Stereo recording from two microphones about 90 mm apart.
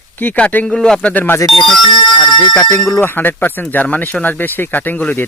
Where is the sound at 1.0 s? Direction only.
15° left (ahead or behind).